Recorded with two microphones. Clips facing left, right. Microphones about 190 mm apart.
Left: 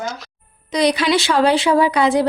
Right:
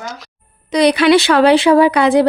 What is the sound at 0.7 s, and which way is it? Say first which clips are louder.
A woman's voice: right 6 dB; 65° right (ahead or behind).